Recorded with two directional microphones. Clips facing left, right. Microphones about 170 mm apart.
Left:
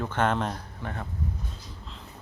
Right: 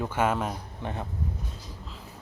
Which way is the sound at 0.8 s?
20° right (ahead or behind).